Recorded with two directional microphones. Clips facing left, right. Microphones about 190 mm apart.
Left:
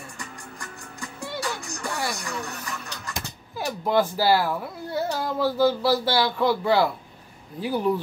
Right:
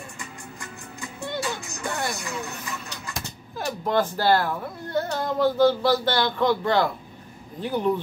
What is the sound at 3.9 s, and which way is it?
Speech, 10° left (ahead or behind).